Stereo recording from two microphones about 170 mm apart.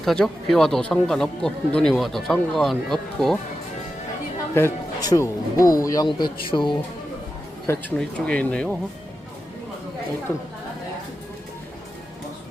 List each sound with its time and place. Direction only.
0.0 s speech: centre (ahead or behind)
4.5 s speech: 20° left (ahead or behind)
7.7 s speech: 10° left (ahead or behind)